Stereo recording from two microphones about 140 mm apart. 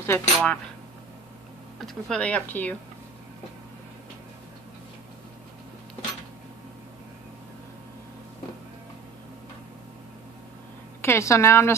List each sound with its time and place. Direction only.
0.0 s speech: 15° left (ahead or behind)
1.8 s speech: 5° left (ahead or behind)
11.0 s a woman's voice: 20° left (ahead or behind)